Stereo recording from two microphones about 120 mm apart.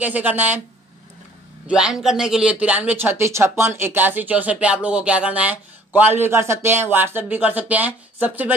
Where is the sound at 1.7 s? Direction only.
5° right (ahead or behind).